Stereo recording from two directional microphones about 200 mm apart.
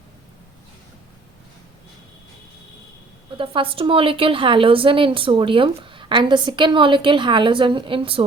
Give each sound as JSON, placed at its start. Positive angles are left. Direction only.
{"t": 3.3, "sound": "a woman's voice", "side_deg": -25}